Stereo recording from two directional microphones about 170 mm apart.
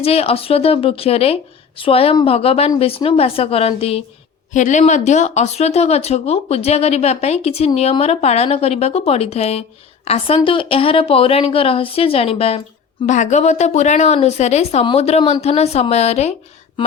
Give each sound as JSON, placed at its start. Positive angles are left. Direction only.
{"t": 0.0, "sound": "speech", "side_deg": 35}
{"t": 4.5, "sound": "speech", "side_deg": 45}
{"t": 13.1, "sound": "speech", "side_deg": 45}